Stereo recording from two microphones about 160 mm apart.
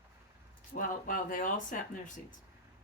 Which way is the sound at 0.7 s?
55° left (ahead or behind).